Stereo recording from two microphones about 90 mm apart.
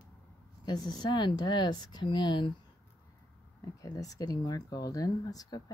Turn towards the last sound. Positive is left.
turn(degrees=45)  # may be behind; listen again after turning